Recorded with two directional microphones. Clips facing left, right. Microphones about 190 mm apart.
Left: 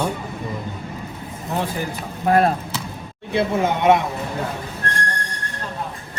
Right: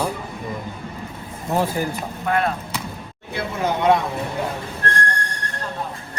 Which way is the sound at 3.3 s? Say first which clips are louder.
Left 4 dB; 25° left (ahead or behind).